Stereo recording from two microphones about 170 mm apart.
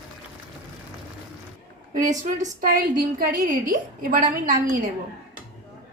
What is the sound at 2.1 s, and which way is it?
A woman's voice, 45° right (ahead or behind).